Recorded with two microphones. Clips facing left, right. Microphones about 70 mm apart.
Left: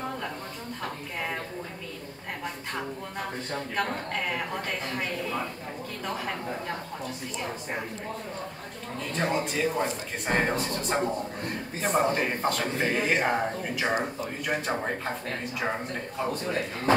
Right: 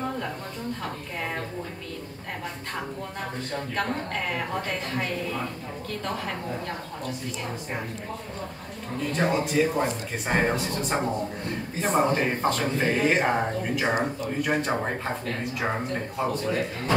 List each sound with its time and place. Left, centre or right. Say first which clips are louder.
3.7 s speech: right 1 dB; centre
9.1 s speech: right 4 dB; centre